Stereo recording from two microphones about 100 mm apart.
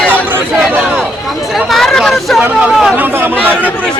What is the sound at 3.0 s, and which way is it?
Chatter, 20° right (ahead or behind).